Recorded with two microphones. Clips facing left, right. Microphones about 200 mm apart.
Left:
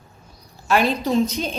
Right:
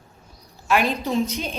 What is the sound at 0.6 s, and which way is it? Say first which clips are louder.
Speech: left 2 dB; 35° left (ahead or behind).